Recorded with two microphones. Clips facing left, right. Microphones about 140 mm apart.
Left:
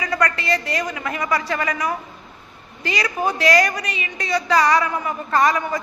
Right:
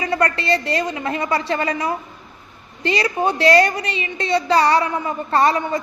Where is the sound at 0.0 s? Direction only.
30° right (ahead or behind).